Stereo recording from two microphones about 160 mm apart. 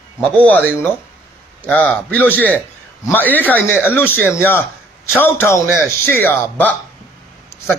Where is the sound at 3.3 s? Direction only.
10° left (ahead or behind).